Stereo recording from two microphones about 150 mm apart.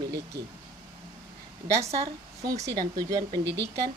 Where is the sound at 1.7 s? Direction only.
20° right (ahead or behind).